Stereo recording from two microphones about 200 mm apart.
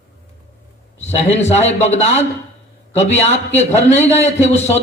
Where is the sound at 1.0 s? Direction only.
35° left (ahead or behind).